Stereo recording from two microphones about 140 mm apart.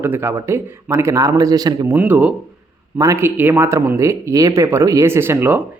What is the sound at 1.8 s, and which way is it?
Speech, 10° right (ahead or behind).